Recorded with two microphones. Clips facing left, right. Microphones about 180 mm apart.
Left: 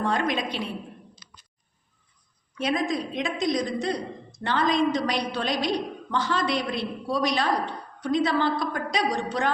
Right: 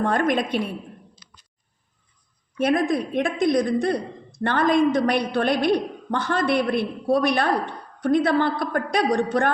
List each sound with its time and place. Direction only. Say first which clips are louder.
0.0 s a woman's voice: right 4 dB; 50° right (ahead or behind)
2.6 s a woman's voice: right 5 dB; 55° right (ahead or behind)